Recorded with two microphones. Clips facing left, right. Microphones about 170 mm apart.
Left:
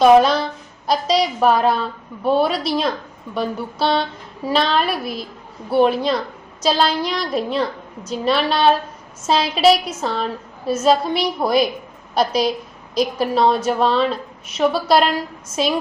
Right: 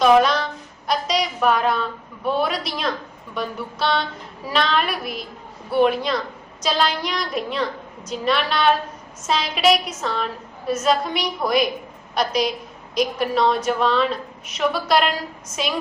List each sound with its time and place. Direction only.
0.0 s a woman's voice: 30° left (ahead or behind)